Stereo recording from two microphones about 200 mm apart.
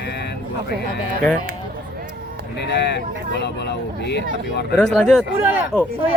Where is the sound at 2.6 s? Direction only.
60° left (ahead or behind).